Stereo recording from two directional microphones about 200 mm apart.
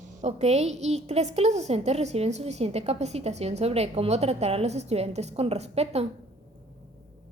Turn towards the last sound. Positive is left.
turn(degrees=-30)  # may be behind; listen again after turning